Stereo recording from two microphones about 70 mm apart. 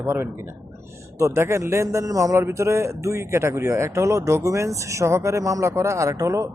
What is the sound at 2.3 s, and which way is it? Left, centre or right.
Speech, right.